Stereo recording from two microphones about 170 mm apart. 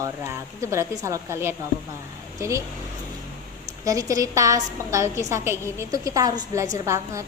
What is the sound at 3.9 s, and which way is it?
A woman's voice, 20° right (ahead or behind).